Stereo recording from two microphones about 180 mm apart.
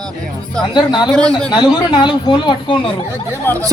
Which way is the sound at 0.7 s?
25° left (ahead or behind).